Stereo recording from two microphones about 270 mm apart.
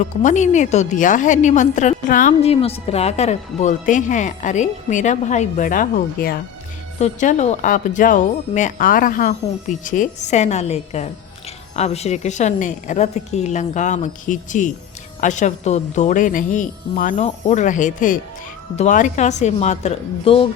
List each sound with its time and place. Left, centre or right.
0.0 s a woman's voice: left